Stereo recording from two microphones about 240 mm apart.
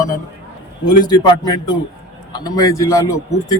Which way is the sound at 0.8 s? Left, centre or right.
Centre.